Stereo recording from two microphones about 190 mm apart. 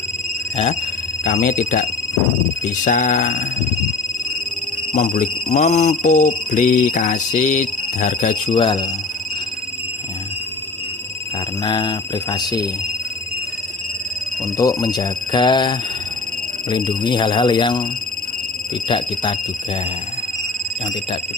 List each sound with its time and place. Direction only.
0.5 s speech: 35° left (ahead or behind)
4.9 s speech: 40° left (ahead or behind)
8.5 s speech: 25° left (ahead or behind)
11.6 s speech: 25° left (ahead or behind)
14.6 s speech: 20° left (ahead or behind)
18.9 s speech: 25° left (ahead or behind)